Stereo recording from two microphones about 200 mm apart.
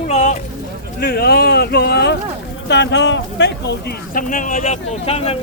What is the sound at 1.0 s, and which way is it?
Speech, 50° left (ahead or behind).